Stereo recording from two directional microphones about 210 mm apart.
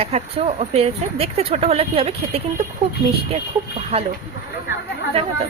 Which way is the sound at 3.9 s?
30° right (ahead or behind).